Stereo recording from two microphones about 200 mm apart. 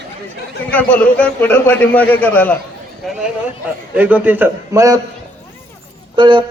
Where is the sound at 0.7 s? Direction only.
10° left (ahead or behind).